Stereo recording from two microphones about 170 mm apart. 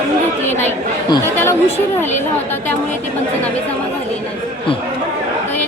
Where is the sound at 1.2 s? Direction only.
15° left (ahead or behind).